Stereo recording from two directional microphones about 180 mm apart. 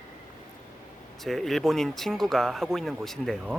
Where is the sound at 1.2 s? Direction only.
Centre (ahead or behind).